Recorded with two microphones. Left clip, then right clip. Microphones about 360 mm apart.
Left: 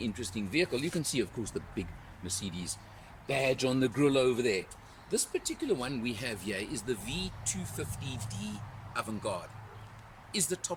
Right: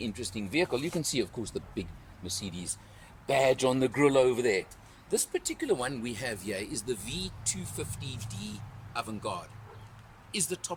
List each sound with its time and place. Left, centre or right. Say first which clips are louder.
0.0 s speech: right 1 dB; centre